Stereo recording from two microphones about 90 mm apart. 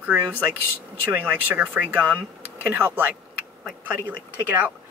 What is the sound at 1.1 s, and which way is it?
Speech, 20° right (ahead or behind).